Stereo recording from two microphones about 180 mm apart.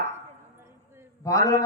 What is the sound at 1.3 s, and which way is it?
Speech, 15° left (ahead or behind).